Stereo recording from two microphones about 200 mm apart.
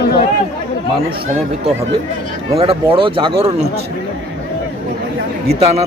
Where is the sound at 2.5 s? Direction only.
30° right (ahead or behind).